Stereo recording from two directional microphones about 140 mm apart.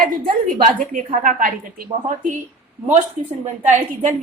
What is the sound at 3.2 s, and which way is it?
Speech, 55° right (ahead or behind).